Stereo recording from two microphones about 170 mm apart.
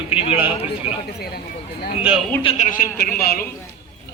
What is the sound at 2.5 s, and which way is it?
Speech, 50° left (ahead or behind).